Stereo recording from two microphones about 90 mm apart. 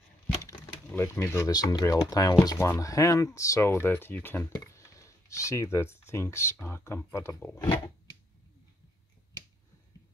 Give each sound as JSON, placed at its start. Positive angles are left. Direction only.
{"t": 0.9, "sound": "speech", "side_deg": 25}
{"t": 1.5, "sound": "speech", "side_deg": 45}
{"t": 4.6, "sound": "speech", "side_deg": 35}